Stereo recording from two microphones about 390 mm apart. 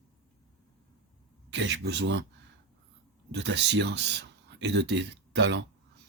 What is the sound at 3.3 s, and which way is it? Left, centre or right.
Speech, right.